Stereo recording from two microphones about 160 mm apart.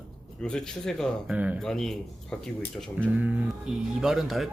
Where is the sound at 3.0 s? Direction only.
10° right (ahead or behind).